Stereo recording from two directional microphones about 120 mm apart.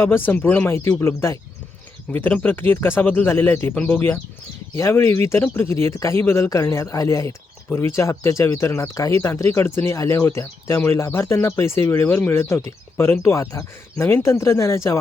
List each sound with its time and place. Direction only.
0.0 s speech: 20° left (ahead or behind)